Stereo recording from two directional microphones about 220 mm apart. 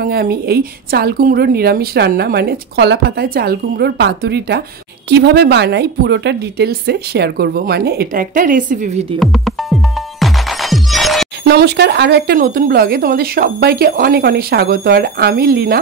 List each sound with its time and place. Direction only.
0.0 s a woman's voice: 45° right (ahead or behind)
9.2 s speech: centre (ahead or behind)
10.2 s music: centre (ahead or behind)
11.4 s a woman's voice: 50° right (ahead or behind)